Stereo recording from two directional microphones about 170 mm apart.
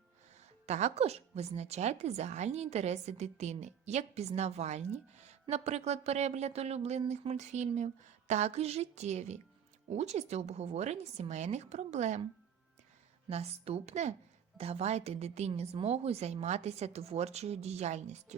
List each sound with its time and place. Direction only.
0.6 s a woman's voice: 40° right (ahead or behind)
13.3 s a woman's voice: 40° right (ahead or behind)